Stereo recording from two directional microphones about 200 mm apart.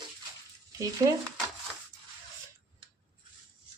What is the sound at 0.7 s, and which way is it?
Speech, 15° right (ahead or behind).